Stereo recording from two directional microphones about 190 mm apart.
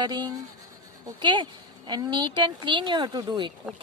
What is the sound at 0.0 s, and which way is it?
A woman's voice, 20° right (ahead or behind).